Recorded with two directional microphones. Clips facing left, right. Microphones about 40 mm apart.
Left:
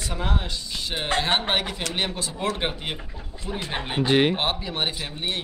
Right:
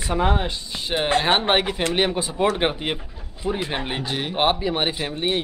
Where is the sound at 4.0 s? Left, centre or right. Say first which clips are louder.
Left 8 dB; left.